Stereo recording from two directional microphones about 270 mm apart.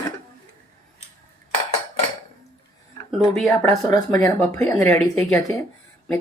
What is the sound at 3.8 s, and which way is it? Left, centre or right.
Speech, centre.